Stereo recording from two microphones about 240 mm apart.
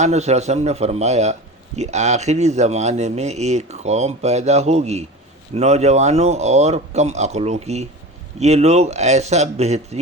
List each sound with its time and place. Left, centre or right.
0.0 s a man's voice: right